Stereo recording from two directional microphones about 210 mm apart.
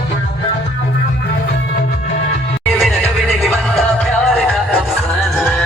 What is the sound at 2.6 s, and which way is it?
Music, centre (ahead or behind).